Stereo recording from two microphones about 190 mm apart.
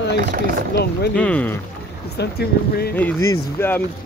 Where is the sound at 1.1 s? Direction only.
5° left (ahead or behind).